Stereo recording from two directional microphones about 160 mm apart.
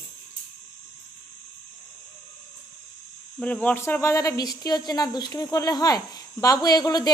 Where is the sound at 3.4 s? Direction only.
5° left (ahead or behind).